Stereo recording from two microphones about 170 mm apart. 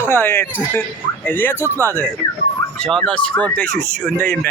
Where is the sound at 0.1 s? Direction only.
15° left (ahead or behind).